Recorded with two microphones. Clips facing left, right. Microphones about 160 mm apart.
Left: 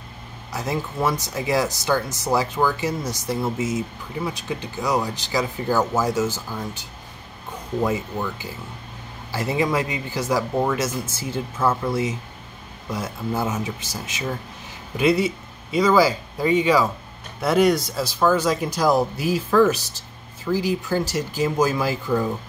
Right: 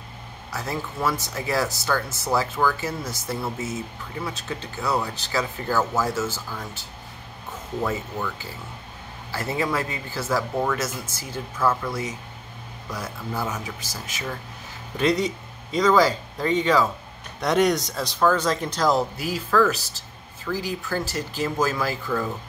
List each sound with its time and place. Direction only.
0.5 s speech: 20° left (ahead or behind)
15.0 s speech: 10° left (ahead or behind)